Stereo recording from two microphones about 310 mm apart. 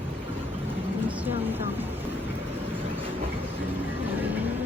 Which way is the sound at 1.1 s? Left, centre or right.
Centre.